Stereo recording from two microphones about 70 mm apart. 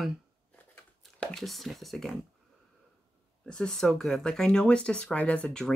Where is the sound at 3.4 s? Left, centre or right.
Centre.